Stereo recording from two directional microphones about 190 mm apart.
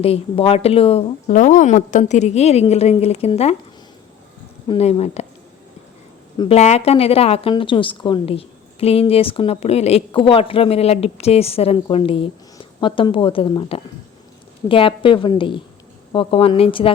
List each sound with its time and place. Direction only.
0.0 s a woman's voice: 30° left (ahead or behind)
4.7 s a woman's voice: 35° left (ahead or behind)
6.3 s speech: 25° left (ahead or behind)
6.6 s a woman's voice: 35° left (ahead or behind)